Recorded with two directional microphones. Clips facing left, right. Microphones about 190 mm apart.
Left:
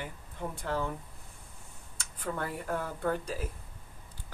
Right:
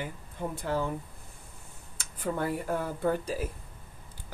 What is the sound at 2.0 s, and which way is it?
Speech, 10° right (ahead or behind).